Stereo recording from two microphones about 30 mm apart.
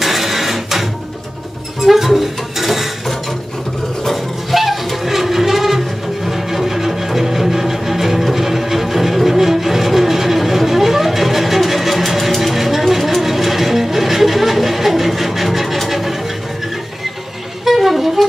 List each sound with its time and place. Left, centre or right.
0.0 s printer: centre
1.8 s music: centre
4.0 s music: centre
15.9 s a sound: centre
17.6 s music: centre